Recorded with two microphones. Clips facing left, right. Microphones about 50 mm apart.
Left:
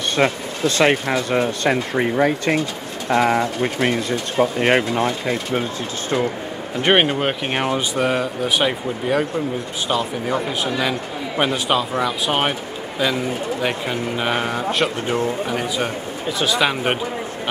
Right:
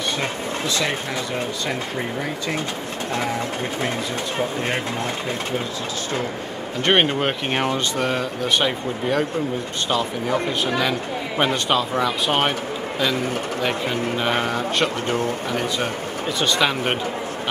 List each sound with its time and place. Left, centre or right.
0.2 s speech: left
6.8 s speech: centre
13.6 s speech: centre
16.3 s speech: centre